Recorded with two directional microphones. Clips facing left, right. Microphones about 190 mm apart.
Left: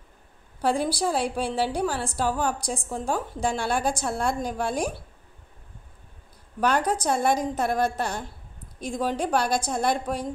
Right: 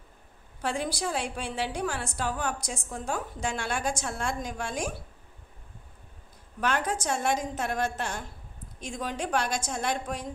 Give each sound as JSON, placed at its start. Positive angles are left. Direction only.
{"t": 0.6, "sound": "a woman's voice", "side_deg": 35}
{"t": 6.6, "sound": "a woman's voice", "side_deg": 40}